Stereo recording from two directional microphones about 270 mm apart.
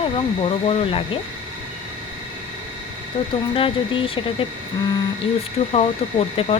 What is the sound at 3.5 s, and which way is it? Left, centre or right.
Speech, centre.